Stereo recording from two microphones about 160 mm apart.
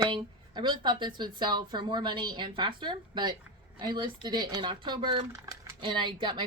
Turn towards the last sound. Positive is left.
turn(degrees=-30)  # may be behind; listen again after turning